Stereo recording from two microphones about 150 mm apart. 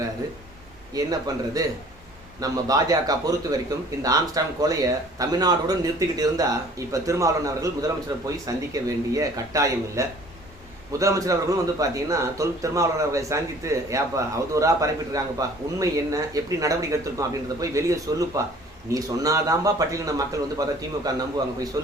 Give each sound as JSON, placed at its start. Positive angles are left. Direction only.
{"t": 0.9, "sound": "a man's voice", "side_deg": -25}